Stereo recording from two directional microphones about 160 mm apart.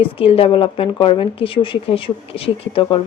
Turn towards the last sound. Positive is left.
turn(degrees=35)  # may be behind; listen again after turning